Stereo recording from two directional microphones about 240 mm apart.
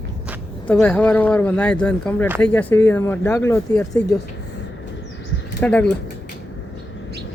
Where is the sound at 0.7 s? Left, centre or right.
Centre.